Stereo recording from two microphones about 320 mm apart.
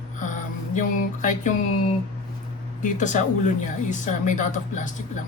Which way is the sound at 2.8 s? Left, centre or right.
Left.